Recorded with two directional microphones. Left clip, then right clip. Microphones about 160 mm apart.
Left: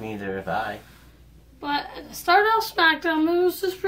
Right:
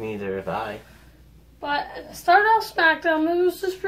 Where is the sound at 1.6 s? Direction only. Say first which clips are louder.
Right 1 dB; 20° left (ahead or behind).